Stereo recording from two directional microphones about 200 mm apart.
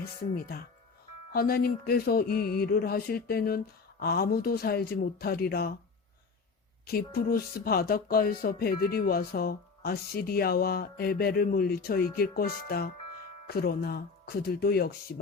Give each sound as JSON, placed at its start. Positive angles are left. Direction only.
{"t": 0.3, "sound": "speech", "side_deg": 50}
{"t": 6.8, "sound": "speech", "side_deg": 50}